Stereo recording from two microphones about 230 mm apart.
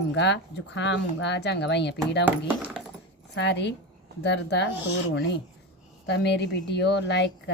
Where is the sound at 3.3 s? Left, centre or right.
Left.